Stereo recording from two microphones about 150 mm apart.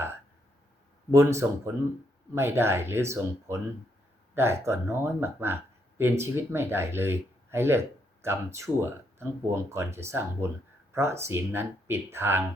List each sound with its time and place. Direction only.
1.1 s speech: 20° right (ahead or behind)